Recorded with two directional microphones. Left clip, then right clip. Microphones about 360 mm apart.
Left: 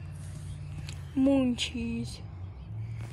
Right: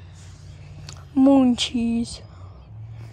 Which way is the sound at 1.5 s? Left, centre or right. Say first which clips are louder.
Right 9 dB; centre.